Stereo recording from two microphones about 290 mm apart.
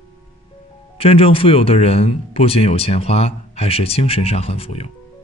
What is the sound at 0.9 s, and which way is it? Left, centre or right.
Speech, centre.